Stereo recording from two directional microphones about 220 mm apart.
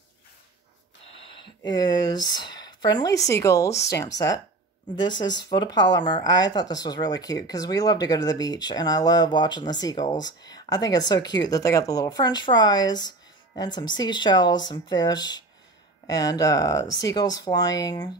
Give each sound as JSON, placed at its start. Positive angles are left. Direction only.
{"t": 1.3, "sound": "a woman's voice", "side_deg": 20}